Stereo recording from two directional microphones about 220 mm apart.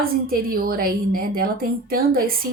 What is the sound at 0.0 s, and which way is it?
A woman's voice, 40° right (ahead or behind).